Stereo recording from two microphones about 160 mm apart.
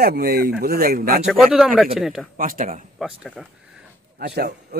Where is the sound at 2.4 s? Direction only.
60° right (ahead or behind).